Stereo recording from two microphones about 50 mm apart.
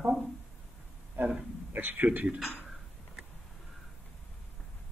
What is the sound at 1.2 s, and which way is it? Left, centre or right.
Speech, right.